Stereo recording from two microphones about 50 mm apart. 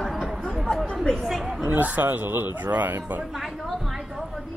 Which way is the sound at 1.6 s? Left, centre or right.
Right.